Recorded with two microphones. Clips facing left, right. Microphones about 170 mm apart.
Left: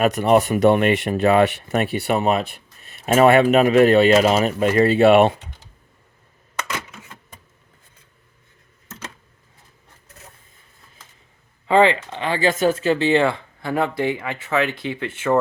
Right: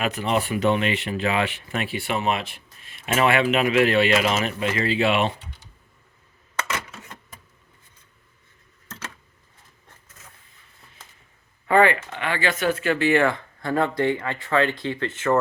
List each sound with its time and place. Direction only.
0.0 s speech: 50° left (ahead or behind)
6.7 s a sound: centre (ahead or behind)
11.6 s speech: 20° left (ahead or behind)